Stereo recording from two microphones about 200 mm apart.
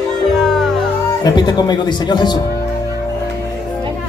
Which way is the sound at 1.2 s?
20° left (ahead or behind).